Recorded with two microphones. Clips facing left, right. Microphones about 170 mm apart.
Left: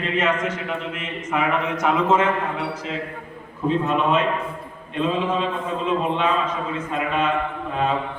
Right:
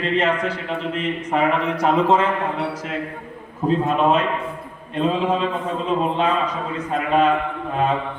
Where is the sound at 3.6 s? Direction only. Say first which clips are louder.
Right 2 dB; 40° right (ahead or behind).